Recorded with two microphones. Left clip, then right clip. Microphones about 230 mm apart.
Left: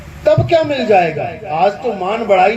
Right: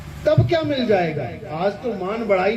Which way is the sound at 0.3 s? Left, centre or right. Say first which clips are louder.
Left 7 dB; left.